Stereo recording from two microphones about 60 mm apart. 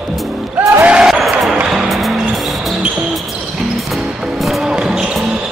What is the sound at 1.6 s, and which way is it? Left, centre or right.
Music, centre.